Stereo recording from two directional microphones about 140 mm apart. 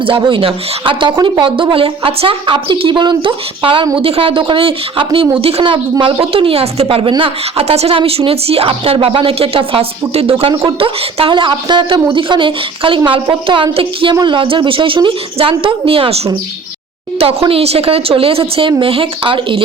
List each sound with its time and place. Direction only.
0.0 s speech: 40° right (ahead or behind)